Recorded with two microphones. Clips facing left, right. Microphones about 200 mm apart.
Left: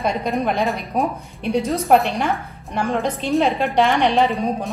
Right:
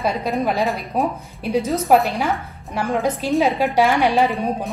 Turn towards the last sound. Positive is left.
turn(degrees=0)  # may be behind; listen again after turning